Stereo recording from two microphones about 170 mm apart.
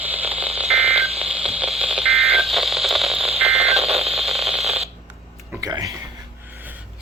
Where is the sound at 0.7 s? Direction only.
35° right (ahead or behind).